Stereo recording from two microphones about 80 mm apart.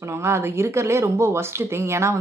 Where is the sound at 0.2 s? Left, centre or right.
Right.